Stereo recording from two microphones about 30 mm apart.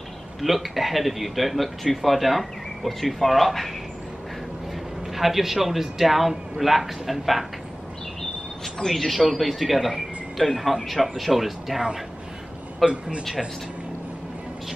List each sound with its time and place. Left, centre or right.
0.4 s a man's voice: centre
5.1 s a man's voice: centre
8.8 s a man's voice: centre
12.8 s a man's voice: right